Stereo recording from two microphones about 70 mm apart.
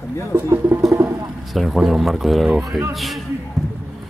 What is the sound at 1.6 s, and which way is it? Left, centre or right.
Speech, centre.